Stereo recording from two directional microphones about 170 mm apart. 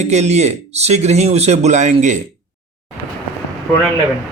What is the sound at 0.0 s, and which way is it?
Speech, 40° right (ahead or behind).